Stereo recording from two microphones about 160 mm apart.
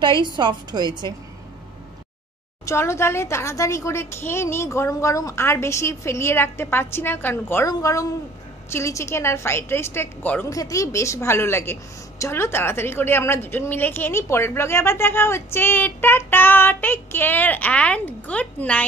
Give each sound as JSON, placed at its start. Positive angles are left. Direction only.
{"t": 0.0, "sound": "a woman's voice", "side_deg": -30}
{"t": 2.6, "sound": "a woman's voice", "side_deg": 15}